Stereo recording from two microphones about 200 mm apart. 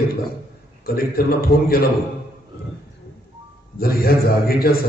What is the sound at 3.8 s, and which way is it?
Speech, 50° left (ahead or behind).